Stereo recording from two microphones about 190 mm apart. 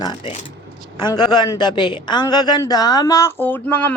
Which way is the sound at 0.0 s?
25° left (ahead or behind).